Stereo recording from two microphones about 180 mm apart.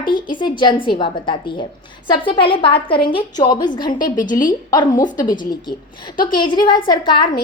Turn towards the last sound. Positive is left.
turn(degrees=25)  # may be behind; listen again after turning